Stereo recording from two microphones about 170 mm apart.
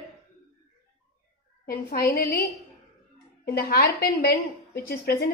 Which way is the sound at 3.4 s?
65° left (ahead or behind).